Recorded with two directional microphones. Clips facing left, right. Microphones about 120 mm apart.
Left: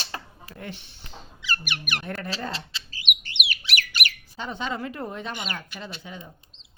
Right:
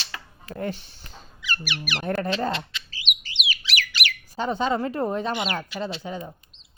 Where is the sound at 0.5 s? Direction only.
40° right (ahead or behind).